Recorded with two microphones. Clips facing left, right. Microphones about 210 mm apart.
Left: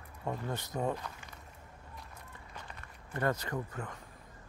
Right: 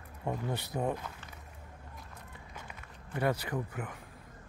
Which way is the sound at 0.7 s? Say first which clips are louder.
Even; 10° right (ahead or behind).